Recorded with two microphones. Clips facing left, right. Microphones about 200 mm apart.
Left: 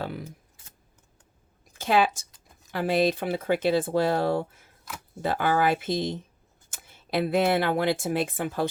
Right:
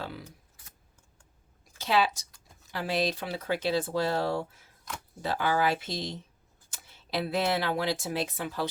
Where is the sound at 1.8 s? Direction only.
50° left (ahead or behind).